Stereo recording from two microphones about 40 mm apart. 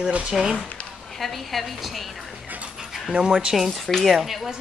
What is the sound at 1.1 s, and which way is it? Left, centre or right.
A woman's voice, centre.